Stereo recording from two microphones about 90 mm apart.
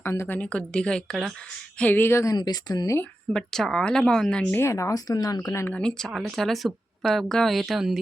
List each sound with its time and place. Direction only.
0.0 s speech: 30° left (ahead or behind)
0.3 s speech: 15° left (ahead or behind)
1.8 s speech: 20° left (ahead or behind)
2.3 s speech: 50° left (ahead or behind)
3.3 s speech: 5° left (ahead or behind)
4.5 s speech: 30° left (ahead or behind)
5.4 s speech: 30° left (ahead or behind)
5.7 s speech: 10° left (ahead or behind)